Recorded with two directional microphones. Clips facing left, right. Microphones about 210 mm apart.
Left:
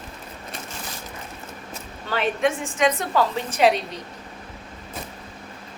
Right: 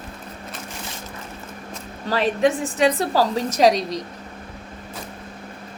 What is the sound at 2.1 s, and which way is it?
A woman's voice, 35° right (ahead or behind).